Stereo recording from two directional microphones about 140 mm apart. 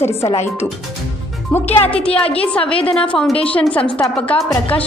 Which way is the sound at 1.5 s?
15° left (ahead or behind).